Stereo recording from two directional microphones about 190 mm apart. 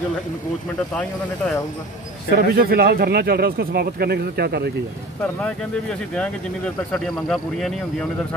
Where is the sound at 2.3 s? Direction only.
55° right (ahead or behind).